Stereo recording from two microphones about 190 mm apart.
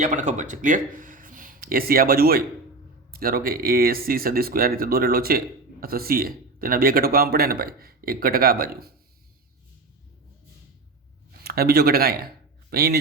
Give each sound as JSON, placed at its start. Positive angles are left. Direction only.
{"t": 0.0, "sound": "a man's voice", "side_deg": -40}
{"t": 11.4, "sound": "a man's voice", "side_deg": -55}